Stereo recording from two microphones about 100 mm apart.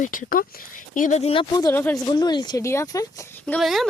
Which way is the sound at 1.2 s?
65° left (ahead or behind).